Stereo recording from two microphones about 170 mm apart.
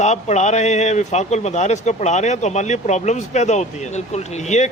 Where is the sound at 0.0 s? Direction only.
40° left (ahead or behind).